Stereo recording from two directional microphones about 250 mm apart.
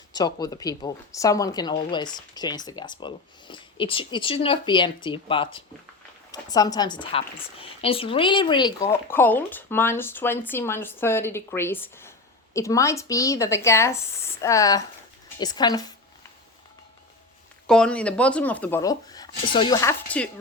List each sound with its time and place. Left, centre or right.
0.1 s speech: centre
17.7 s speech: centre